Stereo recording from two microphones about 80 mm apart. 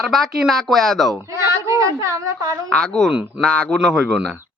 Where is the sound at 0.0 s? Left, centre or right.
Centre.